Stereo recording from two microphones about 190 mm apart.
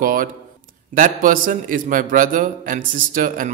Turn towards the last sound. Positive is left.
turn(degrees=-45)  # may be behind; listen again after turning